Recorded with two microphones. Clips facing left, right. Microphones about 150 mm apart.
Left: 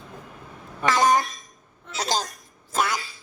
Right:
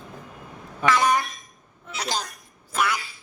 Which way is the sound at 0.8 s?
35° left (ahead or behind).